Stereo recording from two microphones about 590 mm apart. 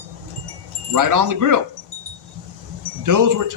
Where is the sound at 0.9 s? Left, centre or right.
Right.